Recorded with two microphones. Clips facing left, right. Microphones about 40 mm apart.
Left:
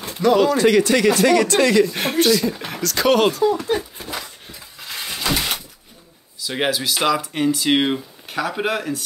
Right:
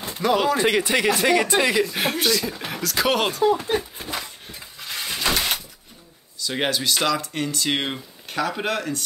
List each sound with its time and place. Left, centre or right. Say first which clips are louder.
0.2 s speech: left 5 dB; centre
1.9 s speech: left 5 dB; centre
3.6 s a sound: left 2 dB; centre
6.4 s speech: left 2 dB; centre